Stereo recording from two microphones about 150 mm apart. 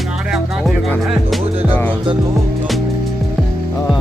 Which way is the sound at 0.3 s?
Centre (ahead or behind).